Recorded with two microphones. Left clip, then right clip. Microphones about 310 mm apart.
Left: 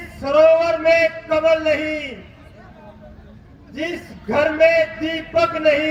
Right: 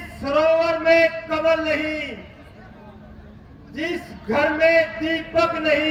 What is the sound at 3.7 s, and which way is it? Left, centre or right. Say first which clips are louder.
Speech: left 1 dB; left.